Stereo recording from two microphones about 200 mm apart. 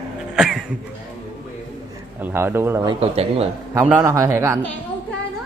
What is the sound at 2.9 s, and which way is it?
Speech, 30° right (ahead or behind).